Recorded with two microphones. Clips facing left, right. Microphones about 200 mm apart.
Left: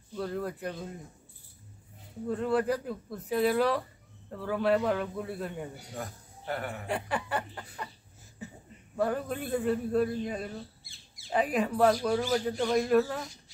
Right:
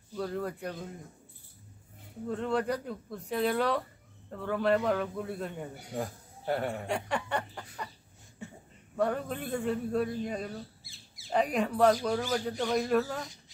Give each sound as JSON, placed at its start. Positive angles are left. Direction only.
{"t": 0.1, "sound": "a man's voice", "side_deg": 0}
{"t": 2.2, "sound": "a man's voice", "side_deg": 5}
{"t": 5.9, "sound": "a man's voice", "side_deg": -30}
{"t": 6.9, "sound": "speech", "side_deg": 5}
{"t": 8.4, "sound": "a sound", "side_deg": 0}
{"t": 8.9, "sound": "a man's voice", "side_deg": 5}